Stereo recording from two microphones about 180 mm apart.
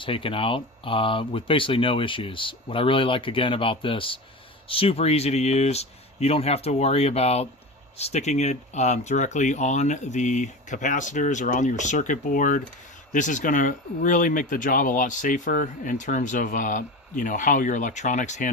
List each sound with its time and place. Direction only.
0.0 s speech: 30° left (ahead or behind)